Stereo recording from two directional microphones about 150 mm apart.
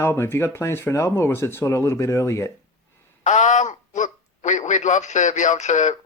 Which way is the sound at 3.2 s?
50° left (ahead or behind).